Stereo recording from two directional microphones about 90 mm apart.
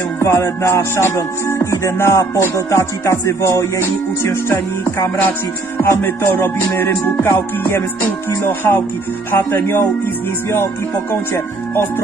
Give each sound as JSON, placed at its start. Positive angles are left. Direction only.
{"t": 0.2, "sound": "music", "side_deg": 35}